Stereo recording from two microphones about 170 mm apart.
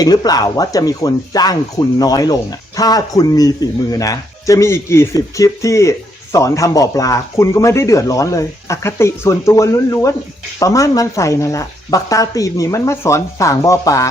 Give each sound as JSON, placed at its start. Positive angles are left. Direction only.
{"t": 0.0, "sound": "a man's voice", "side_deg": 25}